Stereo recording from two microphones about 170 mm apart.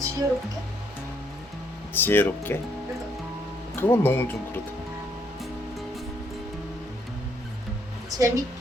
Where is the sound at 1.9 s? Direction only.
10° left (ahead or behind).